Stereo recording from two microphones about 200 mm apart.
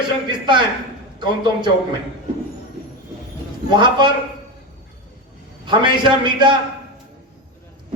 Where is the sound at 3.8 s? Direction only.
25° right (ahead or behind).